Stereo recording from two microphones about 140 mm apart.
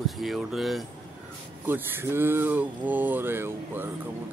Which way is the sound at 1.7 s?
15° right (ahead or behind).